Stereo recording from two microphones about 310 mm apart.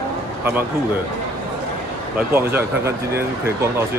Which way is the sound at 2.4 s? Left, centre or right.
Centre.